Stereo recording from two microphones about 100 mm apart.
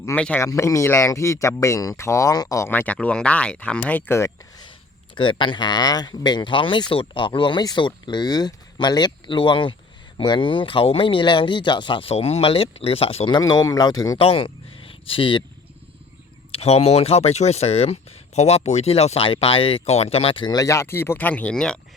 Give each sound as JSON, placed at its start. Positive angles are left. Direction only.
{"t": 0.3, "sound": "speech", "side_deg": 30}
{"t": 2.6, "sound": "speech", "side_deg": 15}
{"t": 5.1, "sound": "speech", "side_deg": 55}
{"t": 13.3, "sound": "speech", "side_deg": 40}
{"t": 14.2, "sound": "speech", "side_deg": 65}
{"t": 16.5, "sound": "speech", "side_deg": 90}
{"t": 20.4, "sound": "speech", "side_deg": 45}
{"t": 20.7, "sound": "speech", "side_deg": 25}